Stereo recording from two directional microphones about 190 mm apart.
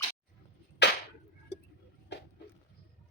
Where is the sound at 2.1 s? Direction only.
65° left (ahead or behind).